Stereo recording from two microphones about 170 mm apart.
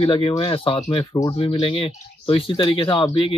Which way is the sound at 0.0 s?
30° left (ahead or behind).